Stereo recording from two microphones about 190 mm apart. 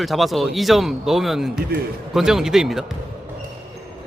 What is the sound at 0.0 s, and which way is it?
A man's voice, centre (ahead or behind).